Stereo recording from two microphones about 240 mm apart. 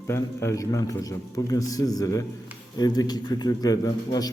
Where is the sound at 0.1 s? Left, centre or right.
Centre.